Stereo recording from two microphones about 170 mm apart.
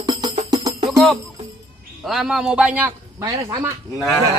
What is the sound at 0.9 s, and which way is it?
Music, centre (ahead or behind).